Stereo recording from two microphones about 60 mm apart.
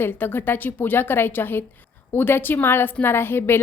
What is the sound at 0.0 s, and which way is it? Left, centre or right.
A woman's voice, left.